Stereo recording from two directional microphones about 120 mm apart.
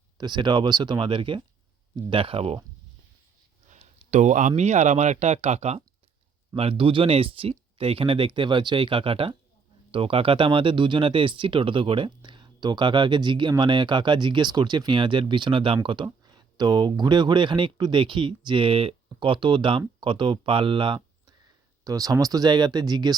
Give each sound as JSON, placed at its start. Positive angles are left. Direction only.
{"t": 0.2, "sound": "speech", "side_deg": -40}
{"t": 3.7, "sound": "speech", "side_deg": -70}
{"t": 6.6, "sound": "speech", "side_deg": -50}
{"t": 21.8, "sound": "speech", "side_deg": -30}